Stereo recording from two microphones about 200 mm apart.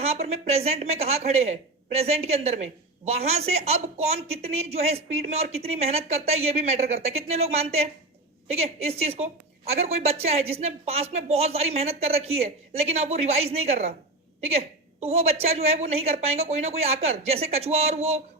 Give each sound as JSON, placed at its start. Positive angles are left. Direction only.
{"t": 0.0, "sound": "a woman's voice", "side_deg": -30}
{"t": 15.0, "sound": "a woman's voice", "side_deg": -30}